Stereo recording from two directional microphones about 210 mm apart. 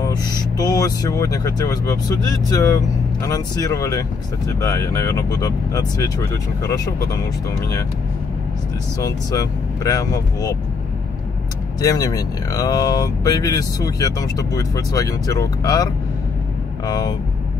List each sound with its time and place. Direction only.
0.0 s speech: 20° left (ahead or behind)
9.0 s speech: 15° left (ahead or behind)
11.8 s speech: 15° left (ahead or behind)